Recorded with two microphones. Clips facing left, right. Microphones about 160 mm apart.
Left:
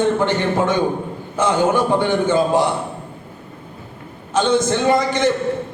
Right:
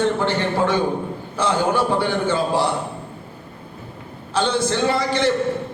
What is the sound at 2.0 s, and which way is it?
Speech, 15° left (ahead or behind).